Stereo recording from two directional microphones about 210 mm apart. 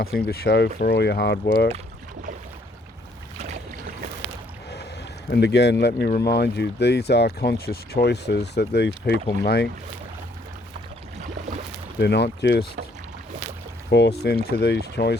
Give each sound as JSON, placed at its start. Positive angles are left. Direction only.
{"t": 0.0, "sound": "speech", "side_deg": 45}
{"t": 5.3, "sound": "speech", "side_deg": 55}
{"t": 11.9, "sound": "speech", "side_deg": 55}
{"t": 13.9, "sound": "speech", "side_deg": 55}